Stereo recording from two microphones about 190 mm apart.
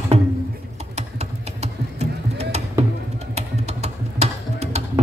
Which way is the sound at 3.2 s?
35° right (ahead or behind).